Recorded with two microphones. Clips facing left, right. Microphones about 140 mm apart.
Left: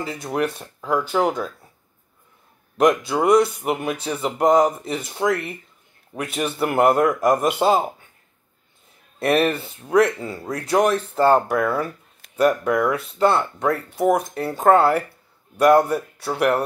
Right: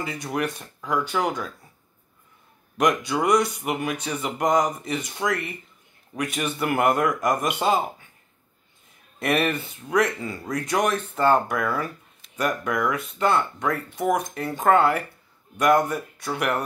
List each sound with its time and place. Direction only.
0.3 s speech: 30° left (ahead or behind)
2.8 s speech: 30° left (ahead or behind)
9.2 s speech: 30° left (ahead or behind)